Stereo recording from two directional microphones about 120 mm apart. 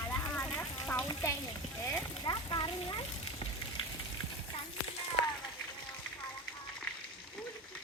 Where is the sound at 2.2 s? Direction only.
35° left (ahead or behind).